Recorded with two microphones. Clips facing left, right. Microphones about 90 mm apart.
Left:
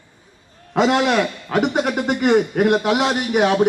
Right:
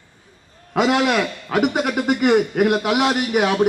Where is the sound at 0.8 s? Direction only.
35° left (ahead or behind).